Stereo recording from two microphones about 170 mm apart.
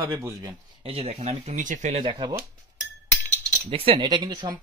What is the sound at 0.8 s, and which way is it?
Speech, 35° right (ahead or behind).